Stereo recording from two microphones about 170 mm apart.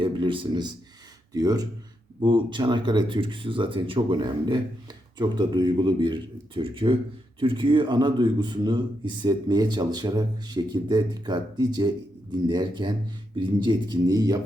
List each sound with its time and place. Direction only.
0.0 s a man's voice: 30° right (ahead or behind)